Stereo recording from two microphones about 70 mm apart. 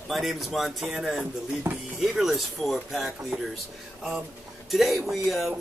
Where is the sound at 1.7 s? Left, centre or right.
Right.